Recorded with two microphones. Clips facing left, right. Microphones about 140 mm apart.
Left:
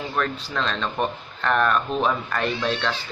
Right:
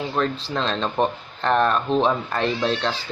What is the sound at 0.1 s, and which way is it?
Speech, 30° right (ahead or behind).